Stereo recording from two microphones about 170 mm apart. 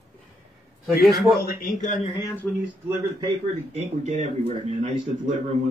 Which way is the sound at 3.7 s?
40° right (ahead or behind).